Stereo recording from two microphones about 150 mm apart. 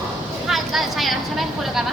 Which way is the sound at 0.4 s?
Centre (ahead or behind).